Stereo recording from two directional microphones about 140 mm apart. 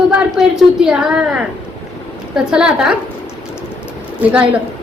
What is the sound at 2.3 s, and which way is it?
Speech, 5° right (ahead or behind).